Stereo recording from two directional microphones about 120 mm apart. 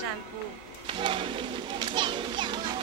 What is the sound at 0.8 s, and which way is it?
A child's voice, 45° right (ahead or behind).